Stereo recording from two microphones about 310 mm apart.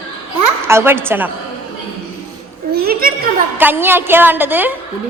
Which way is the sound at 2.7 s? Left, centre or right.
Right.